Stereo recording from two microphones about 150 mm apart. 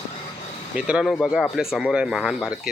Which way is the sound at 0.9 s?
5° right (ahead or behind).